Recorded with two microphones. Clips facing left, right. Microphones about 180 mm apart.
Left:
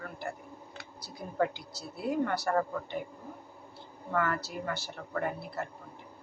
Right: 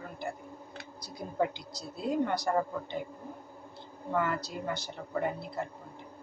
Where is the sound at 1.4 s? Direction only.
15° right (ahead or behind).